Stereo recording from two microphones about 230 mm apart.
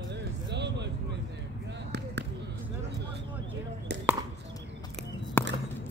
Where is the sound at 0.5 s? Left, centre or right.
Right.